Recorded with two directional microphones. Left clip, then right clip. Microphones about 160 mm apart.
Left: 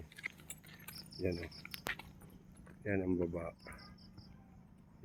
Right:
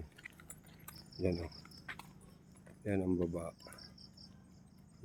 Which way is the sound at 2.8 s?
25° right (ahead or behind).